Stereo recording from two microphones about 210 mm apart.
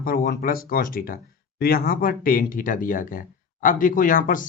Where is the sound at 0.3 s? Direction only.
45° left (ahead or behind).